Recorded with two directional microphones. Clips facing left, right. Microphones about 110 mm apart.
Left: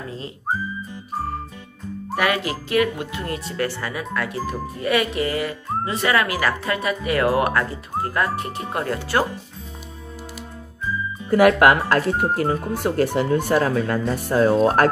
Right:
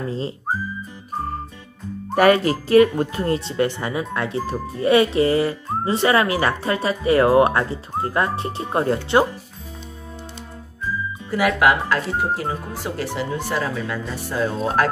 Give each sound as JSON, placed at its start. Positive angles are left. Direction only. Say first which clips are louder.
{"t": 2.1, "sound": "speech", "louder": "right 7 dB", "side_deg": -40}
{"t": 11.2, "sound": "speech", "louder": "left 4 dB", "side_deg": 50}